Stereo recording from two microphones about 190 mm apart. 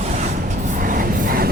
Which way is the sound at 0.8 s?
45° right (ahead or behind).